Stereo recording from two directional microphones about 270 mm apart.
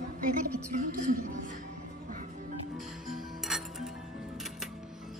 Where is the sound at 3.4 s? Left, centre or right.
Centre.